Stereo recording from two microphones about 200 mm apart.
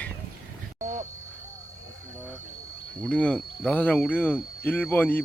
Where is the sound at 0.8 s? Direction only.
40° right (ahead or behind).